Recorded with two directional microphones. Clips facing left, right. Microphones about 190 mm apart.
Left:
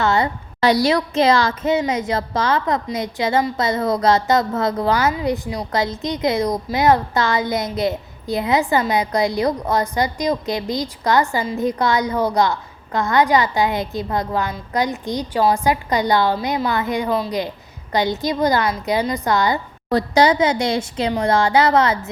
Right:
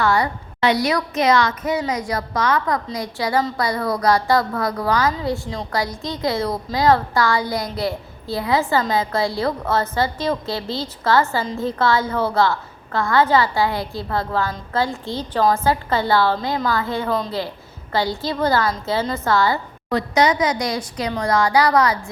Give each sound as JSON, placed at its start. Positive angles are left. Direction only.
{"t": 0.0, "sound": "a sound", "side_deg": 25}
{"t": 0.6, "sound": "a woman's voice", "side_deg": 35}
{"t": 19.9, "sound": "a woman's voice", "side_deg": 35}